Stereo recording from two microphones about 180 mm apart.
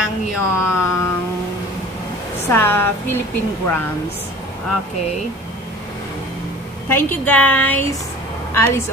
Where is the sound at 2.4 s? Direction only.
15° left (ahead or behind).